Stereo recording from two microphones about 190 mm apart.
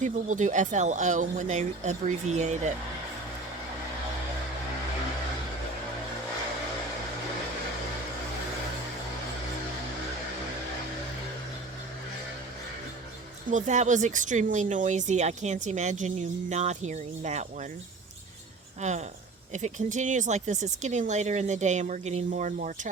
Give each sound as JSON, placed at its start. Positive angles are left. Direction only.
{"t": 0.0, "sound": "speech", "side_deg": -40}
{"t": 13.5, "sound": "speech", "side_deg": -40}
{"t": 18.8, "sound": "speech", "side_deg": -35}